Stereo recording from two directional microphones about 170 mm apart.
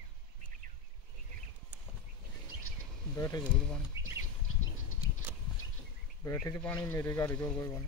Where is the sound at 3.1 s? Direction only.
20° left (ahead or behind).